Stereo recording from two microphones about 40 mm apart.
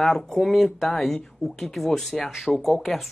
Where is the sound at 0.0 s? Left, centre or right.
Centre.